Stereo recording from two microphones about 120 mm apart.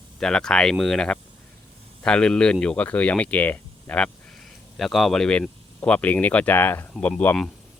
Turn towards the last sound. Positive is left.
turn(degrees=15)  # may be behind; listen again after turning